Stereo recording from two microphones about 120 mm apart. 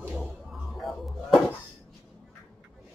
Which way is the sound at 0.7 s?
Centre (ahead or behind).